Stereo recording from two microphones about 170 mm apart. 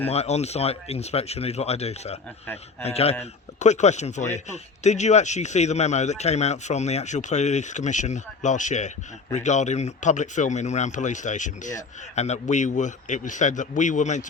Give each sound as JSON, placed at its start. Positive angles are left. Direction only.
{"t": 0.1, "sound": "speech", "side_deg": 40}